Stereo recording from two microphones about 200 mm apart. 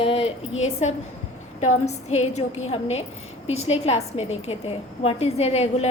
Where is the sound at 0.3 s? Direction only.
75° left (ahead or behind).